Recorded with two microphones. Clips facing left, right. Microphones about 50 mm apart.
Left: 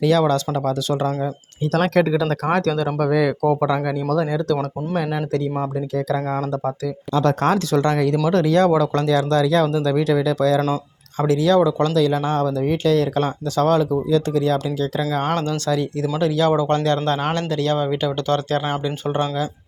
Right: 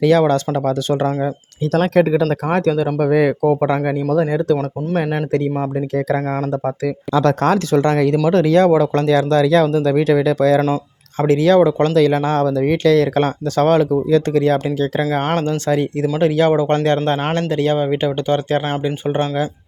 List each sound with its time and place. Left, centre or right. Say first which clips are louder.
0.0 s speech: right 4 dB; right
2.0 s speech: right 5 dB; right
3.1 s speech: right 4 dB; right
3.4 s speech: right 3 dB; centre
4.1 s speech: right 4 dB; right
6.4 s speech: right 3 dB; right
6.8 s speech: right 4 dB; right
7.7 s speech: right 4 dB; right
13.7 s speech: right 4 dB; right
15.4 s speech: right 4 dB; right